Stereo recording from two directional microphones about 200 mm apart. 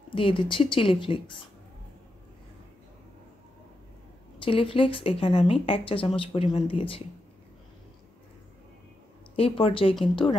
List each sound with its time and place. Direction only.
0.1 s a woman's voice: 25° left (ahead or behind)
4.5 s a woman's voice: 25° left (ahead or behind)
9.4 s a woman's voice: 30° left (ahead or behind)